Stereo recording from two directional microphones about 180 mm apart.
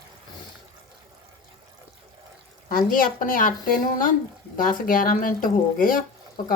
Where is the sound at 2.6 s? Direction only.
50° left (ahead or behind).